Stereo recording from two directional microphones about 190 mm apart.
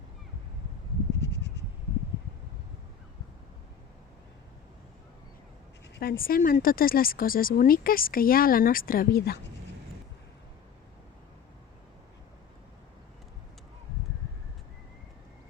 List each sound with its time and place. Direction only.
1.2 s bleat: 65° left (ahead or behind)
6.0 s speech: 50° left (ahead or behind)